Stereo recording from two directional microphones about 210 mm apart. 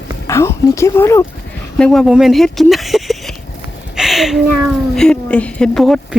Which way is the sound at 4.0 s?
Centre (ahead or behind).